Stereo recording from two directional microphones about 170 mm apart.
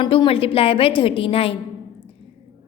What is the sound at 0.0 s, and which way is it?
A woman's voice, 30° left (ahead or behind).